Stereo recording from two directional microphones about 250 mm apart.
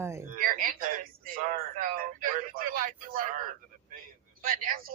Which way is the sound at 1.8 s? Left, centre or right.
Right.